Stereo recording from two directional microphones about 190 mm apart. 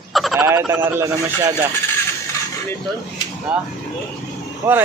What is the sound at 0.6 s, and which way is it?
Speech, 10° right (ahead or behind).